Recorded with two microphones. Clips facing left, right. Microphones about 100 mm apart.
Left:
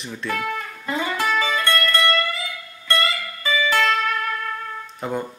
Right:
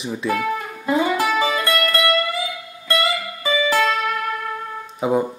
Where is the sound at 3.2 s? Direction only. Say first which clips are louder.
Right 2 dB; 15° right (ahead or behind).